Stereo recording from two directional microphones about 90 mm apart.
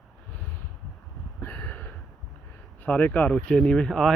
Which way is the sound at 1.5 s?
15° left (ahead or behind).